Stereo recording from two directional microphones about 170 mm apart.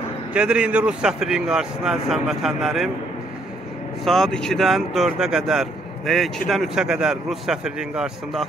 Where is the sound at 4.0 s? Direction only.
Centre (ahead or behind).